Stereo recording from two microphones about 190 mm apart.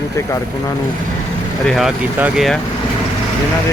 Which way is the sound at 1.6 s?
Centre (ahead or behind).